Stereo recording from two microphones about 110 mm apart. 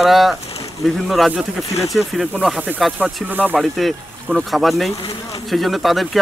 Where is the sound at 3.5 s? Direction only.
Centre (ahead or behind).